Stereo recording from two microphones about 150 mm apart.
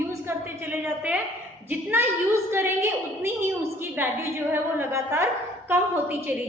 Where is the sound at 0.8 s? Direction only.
10° right (ahead or behind).